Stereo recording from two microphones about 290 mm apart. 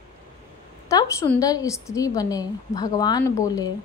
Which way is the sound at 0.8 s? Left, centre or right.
Centre.